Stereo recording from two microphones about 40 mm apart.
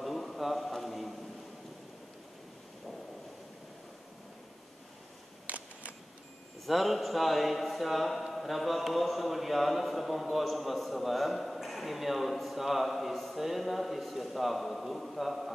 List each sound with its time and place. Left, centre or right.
0.0 s a sound: centre
5.5 s single-lens reflex camera: right
6.6 s a man's voice: centre